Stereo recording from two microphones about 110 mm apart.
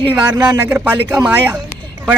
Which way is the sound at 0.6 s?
20° right (ahead or behind).